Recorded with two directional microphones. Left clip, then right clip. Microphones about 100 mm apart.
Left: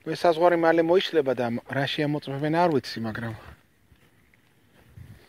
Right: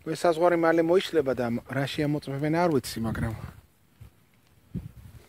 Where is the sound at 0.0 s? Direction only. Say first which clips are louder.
Left 2 dB; 15° right (ahead or behind); by 3.5 s 35° right (ahead or behind).